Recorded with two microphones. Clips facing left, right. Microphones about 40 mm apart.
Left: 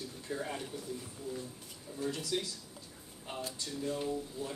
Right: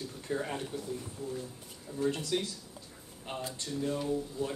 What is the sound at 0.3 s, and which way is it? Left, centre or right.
Speech, right.